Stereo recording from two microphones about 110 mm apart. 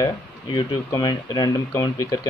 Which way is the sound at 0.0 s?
40° left (ahead or behind).